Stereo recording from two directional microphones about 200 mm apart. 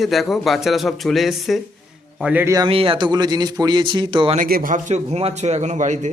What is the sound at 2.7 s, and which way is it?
Speech, 25° right (ahead or behind).